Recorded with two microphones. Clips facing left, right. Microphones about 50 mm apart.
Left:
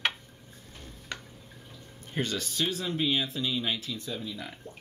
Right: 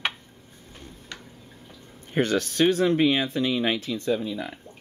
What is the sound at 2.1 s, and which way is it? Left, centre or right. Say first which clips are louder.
Speech: right 9 dB; right.